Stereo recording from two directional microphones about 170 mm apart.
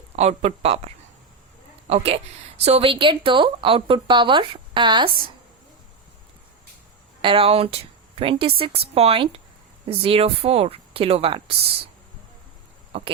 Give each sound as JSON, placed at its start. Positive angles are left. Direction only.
{"t": 0.2, "sound": "speech", "side_deg": -40}
{"t": 1.9, "sound": "a woman's voice", "side_deg": -40}
{"t": 7.2, "sound": "speech", "side_deg": -30}